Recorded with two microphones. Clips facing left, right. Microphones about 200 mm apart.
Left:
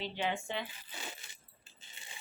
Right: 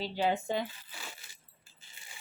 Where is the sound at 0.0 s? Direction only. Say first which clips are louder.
Right 5 dB; 35° right (ahead or behind).